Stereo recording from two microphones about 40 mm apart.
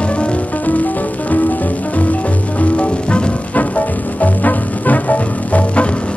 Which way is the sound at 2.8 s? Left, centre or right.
Left.